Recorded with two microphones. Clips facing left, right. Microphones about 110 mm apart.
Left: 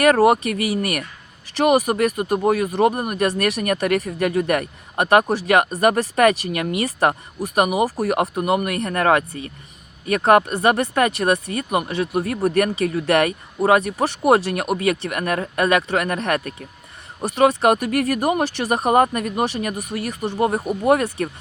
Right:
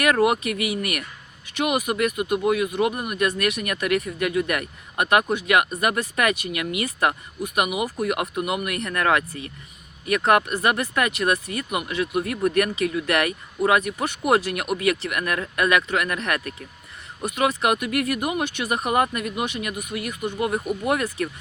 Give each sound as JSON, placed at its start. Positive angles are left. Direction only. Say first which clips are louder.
{"t": 0.0, "sound": "speech", "louder": "left 5 dB", "side_deg": 35}